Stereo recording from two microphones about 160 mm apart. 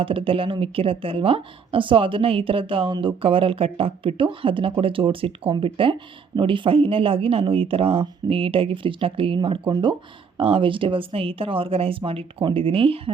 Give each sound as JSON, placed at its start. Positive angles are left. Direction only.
{"t": 0.0, "sound": "speech", "side_deg": -35}